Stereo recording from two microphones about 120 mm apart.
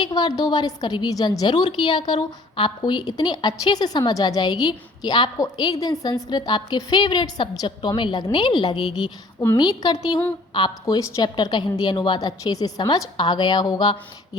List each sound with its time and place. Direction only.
0.0 s a woman's voice: 35° left (ahead or behind)